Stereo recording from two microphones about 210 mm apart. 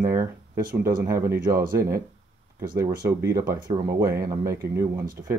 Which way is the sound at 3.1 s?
15° right (ahead or behind).